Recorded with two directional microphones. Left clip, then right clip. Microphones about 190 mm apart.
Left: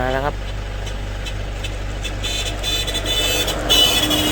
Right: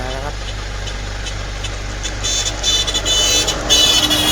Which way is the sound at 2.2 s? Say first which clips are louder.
Right 5 dB; 35° left (ahead or behind).